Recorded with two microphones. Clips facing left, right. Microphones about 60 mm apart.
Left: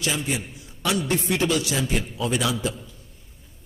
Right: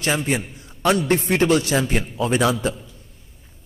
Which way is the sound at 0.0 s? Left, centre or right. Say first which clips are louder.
Right 5 dB; right.